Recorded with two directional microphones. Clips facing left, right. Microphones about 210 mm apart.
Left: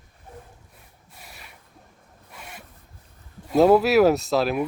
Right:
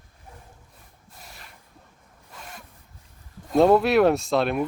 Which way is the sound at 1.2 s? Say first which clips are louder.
Left 1 dB; 5° left (ahead or behind).